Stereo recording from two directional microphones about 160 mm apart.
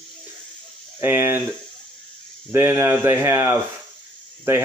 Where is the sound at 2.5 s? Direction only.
15° right (ahead or behind).